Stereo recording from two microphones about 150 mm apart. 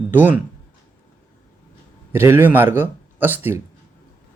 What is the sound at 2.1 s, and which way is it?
Speech, 15° right (ahead or behind).